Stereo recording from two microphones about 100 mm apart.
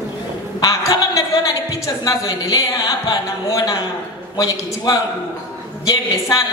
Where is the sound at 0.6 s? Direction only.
35° left (ahead or behind).